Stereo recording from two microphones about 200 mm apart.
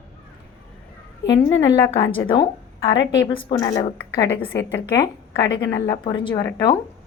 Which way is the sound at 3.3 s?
25° left (ahead or behind).